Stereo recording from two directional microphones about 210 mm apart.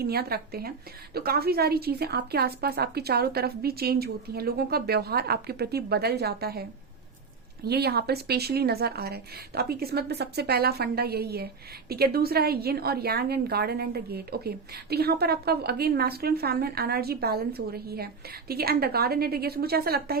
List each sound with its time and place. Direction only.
0.0 s a woman's voice: 50° right (ahead or behind)